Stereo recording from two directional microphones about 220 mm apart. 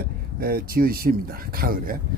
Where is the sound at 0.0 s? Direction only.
40° right (ahead or behind).